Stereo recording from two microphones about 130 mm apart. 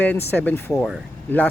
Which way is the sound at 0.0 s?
15° left (ahead or behind).